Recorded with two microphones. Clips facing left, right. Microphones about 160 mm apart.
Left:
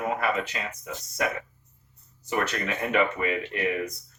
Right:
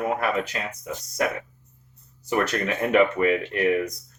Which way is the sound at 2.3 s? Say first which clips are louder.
Right 4 dB; 40° right (ahead or behind).